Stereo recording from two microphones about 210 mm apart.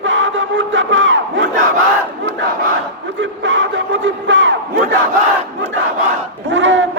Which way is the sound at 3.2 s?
60° right (ahead or behind).